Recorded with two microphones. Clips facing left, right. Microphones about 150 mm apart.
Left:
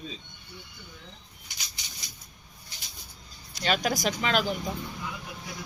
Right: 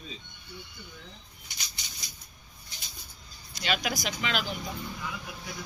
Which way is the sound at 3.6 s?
45° left (ahead or behind).